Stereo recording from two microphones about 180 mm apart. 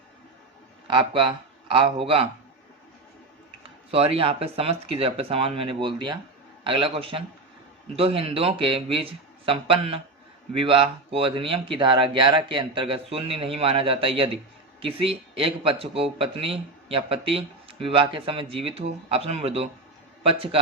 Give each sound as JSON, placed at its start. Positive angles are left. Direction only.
{"t": 0.9, "sound": "speech", "side_deg": -25}
{"t": 3.9, "sound": "speech", "side_deg": -30}